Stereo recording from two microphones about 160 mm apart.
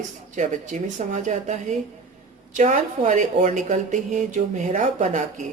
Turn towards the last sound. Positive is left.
turn(degrees=-50)  # may be behind; listen again after turning